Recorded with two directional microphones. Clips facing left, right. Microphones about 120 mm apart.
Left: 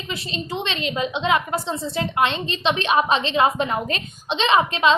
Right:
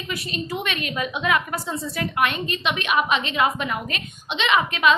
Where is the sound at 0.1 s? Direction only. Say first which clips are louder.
Even; 25° left (ahead or behind).